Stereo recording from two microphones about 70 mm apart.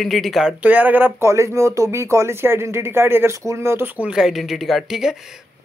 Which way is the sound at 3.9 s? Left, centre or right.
Centre.